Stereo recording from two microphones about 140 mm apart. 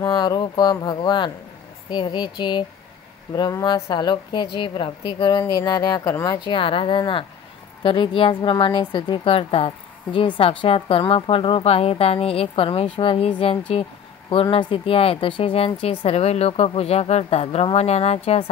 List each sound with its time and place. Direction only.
0.0 s a woman's voice: 30° left (ahead or behind); by 18.4 s 45° left (ahead or behind)